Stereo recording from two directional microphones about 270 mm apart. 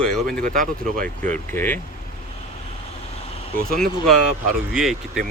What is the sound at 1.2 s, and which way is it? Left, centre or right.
Speech, centre.